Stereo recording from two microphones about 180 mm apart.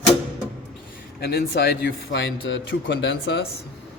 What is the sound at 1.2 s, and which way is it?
Speech, 65° left (ahead or behind).